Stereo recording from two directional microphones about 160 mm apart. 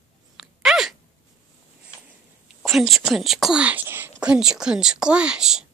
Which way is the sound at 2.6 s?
Centre (ahead or behind).